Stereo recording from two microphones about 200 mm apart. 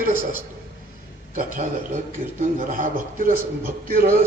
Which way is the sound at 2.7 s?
45° right (ahead or behind).